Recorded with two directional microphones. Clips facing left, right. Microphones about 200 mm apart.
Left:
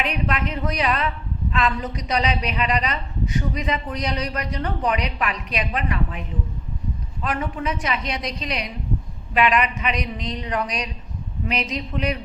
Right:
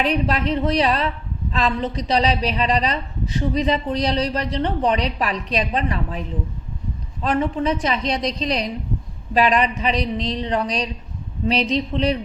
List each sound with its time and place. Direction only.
0.0 s a woman's voice: 35° right (ahead or behind)